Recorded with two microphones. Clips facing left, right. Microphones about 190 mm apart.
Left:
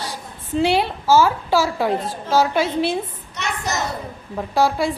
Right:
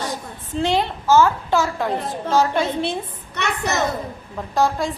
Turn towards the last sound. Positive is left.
turn(degrees=10)  # may be behind; listen again after turning